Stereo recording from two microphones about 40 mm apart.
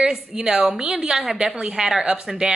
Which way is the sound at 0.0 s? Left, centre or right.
Right.